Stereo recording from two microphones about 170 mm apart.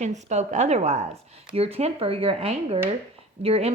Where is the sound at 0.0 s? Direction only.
45° right (ahead or behind).